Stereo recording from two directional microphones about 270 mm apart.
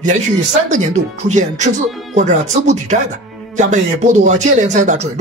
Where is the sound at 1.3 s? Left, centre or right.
Right.